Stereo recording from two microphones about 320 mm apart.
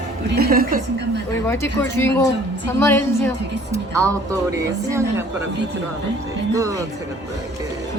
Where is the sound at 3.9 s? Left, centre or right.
Centre.